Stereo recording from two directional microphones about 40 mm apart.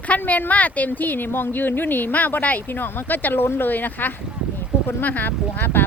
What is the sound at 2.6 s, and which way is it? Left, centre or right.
Speech, left.